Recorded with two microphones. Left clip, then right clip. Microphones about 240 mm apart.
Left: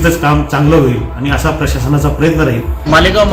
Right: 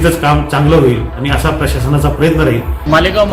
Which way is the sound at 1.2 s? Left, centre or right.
Centre.